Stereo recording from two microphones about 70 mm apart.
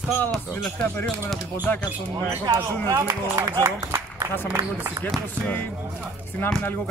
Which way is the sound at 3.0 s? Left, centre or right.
Right.